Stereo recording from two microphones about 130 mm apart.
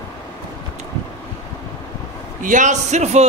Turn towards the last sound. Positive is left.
turn(degrees=-65)  # may be behind; listen again after turning